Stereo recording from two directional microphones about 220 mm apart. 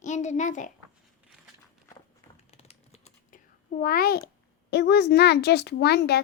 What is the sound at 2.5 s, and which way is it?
Computer keyboard, 30° left (ahead or behind).